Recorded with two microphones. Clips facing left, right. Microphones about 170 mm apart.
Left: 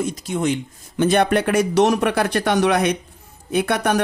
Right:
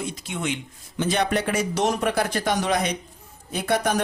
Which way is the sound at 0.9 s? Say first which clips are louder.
Left 6 dB; 55° left (ahead or behind).